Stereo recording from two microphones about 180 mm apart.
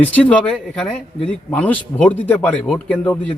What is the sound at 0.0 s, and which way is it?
Speech, 10° left (ahead or behind).